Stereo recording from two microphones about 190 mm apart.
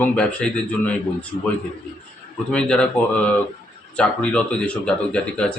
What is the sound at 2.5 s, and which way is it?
Speech, 5° left (ahead or behind).